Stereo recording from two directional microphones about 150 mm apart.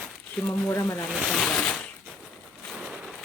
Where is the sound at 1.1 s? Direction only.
5° right (ahead or behind).